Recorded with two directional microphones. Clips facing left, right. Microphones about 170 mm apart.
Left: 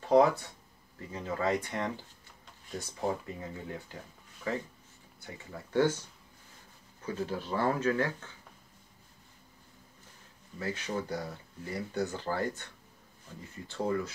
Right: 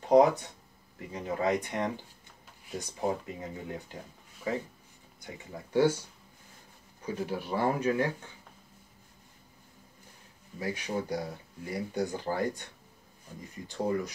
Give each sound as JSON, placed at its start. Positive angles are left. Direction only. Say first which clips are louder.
{"t": 0.0, "sound": "a sound", "louder": "right 2 dB", "side_deg": -20}
{"t": 0.9, "sound": "speech", "louder": "right 2 dB", "side_deg": -15}
{"t": 5.2, "sound": "speech", "louder": "right 2 dB", "side_deg": -15}
{"t": 10.6, "sound": "speech", "louder": "right 2 dB", "side_deg": -15}